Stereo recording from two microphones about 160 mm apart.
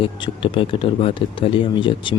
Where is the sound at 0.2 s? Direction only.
30° left (ahead or behind).